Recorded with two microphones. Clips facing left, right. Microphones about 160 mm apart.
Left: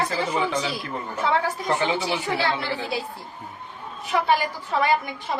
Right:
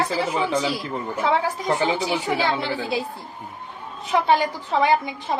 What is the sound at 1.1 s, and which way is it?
A woman's voice, 10° right (ahead or behind).